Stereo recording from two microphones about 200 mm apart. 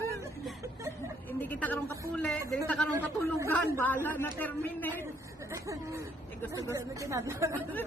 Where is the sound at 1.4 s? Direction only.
10° left (ahead or behind).